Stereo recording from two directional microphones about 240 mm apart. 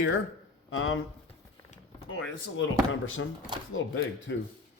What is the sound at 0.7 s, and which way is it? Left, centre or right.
Speech, left.